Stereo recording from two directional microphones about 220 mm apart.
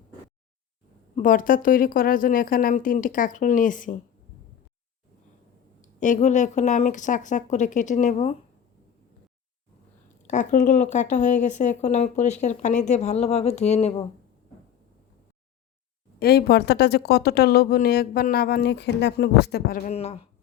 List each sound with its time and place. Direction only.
1.1 s speech: 35° left (ahead or behind)
6.0 s speech: 35° left (ahead or behind)
10.2 s speech: 35° left (ahead or behind)
16.2 s speech: 45° left (ahead or behind)
19.9 s speech: 30° left (ahead or behind)